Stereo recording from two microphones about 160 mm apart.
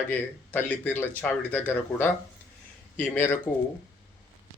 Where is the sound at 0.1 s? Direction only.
10° left (ahead or behind).